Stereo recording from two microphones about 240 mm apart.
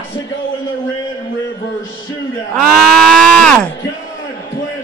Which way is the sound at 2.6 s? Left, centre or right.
Centre.